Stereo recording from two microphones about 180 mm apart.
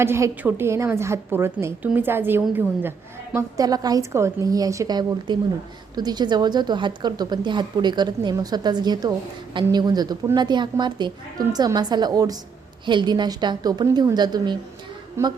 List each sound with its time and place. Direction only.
0.0 s a woman's voice: 15° right (ahead or behind)